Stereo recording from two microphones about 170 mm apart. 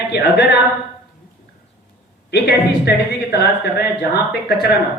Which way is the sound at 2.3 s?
70° left (ahead or behind).